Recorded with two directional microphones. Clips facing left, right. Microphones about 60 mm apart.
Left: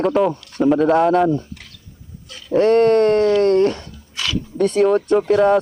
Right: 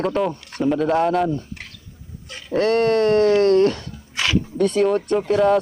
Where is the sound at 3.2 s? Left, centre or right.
Right.